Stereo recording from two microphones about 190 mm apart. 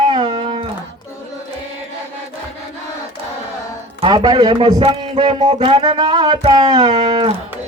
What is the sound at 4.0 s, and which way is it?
A man's voice, 25° right (ahead or behind).